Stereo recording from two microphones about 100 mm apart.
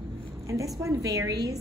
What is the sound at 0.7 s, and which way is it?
Speech, 35° right (ahead or behind).